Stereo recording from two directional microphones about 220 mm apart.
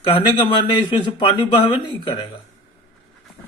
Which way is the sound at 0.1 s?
20° left (ahead or behind).